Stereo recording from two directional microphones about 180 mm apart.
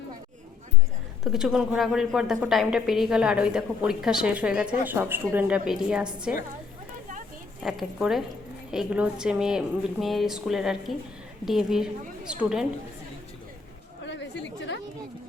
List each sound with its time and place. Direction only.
1.2 s a woman's voice: centre (ahead or behind)
7.6 s a woman's voice: centre (ahead or behind)
14.0 s chatter: 80° left